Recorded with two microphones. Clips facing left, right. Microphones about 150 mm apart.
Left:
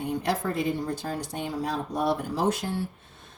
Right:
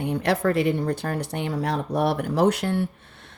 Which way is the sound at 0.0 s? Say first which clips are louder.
Right 5 dB; 70° right (ahead or behind).